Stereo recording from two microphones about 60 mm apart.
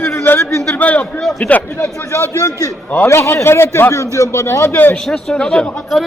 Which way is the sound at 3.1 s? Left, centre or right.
Left.